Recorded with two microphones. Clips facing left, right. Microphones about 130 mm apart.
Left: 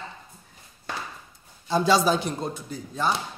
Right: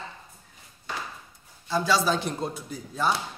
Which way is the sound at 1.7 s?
20° left (ahead or behind).